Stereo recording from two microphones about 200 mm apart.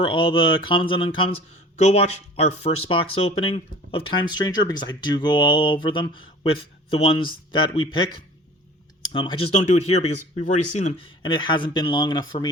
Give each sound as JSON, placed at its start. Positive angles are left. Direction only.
{"t": 0.0, "sound": "speech", "side_deg": 25}
{"t": 9.9, "sound": "speech", "side_deg": 35}
{"t": 11.0, "sound": "speech", "side_deg": 25}